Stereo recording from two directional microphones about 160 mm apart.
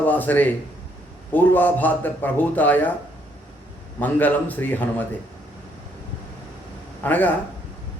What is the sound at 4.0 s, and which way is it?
Speech, 10° left (ahead or behind).